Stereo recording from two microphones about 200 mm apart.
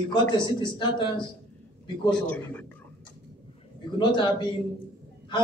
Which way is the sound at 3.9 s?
20° left (ahead or behind).